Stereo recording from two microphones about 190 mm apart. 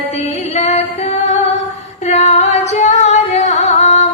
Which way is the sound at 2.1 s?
35° left (ahead or behind).